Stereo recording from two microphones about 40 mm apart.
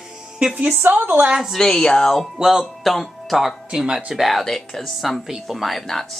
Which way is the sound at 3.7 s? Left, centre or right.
Centre.